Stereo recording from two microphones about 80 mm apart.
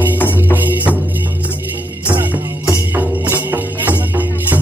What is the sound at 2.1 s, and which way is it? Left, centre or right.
Music, right.